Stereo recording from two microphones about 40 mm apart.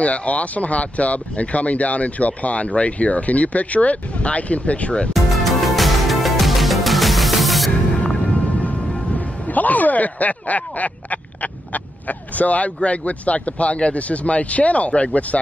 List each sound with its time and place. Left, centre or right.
0.0 s speech: left
5.1 s music: centre
8.2 s music: left
9.1 s speech: left